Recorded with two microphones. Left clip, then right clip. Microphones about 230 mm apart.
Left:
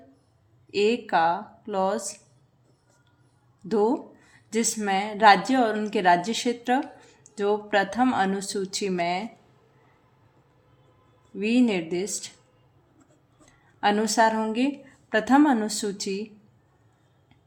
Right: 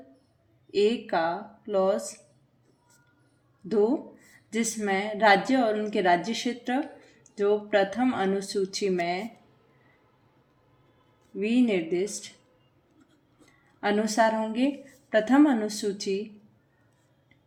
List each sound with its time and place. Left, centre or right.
0.7 s speech: left
3.7 s speech: left
11.3 s speech: left
13.8 s speech: left